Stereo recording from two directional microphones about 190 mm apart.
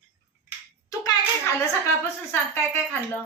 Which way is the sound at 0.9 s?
20° left (ahead or behind).